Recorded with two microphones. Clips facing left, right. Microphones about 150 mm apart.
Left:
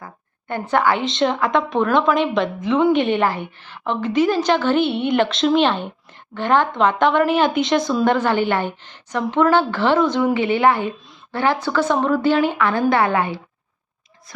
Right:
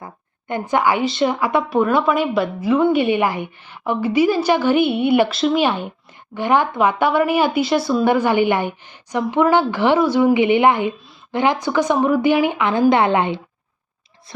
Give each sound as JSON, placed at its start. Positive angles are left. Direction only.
{"t": 0.0, "sound": "a woman's voice", "side_deg": -15}